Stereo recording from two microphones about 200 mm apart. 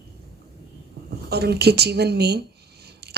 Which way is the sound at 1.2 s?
55° right (ahead or behind).